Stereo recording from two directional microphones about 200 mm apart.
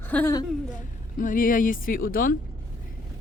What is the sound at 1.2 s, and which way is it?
Speech, 40° left (ahead or behind).